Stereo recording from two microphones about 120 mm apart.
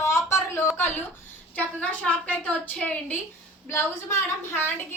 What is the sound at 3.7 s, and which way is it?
A woman's voice, 20° left (ahead or behind).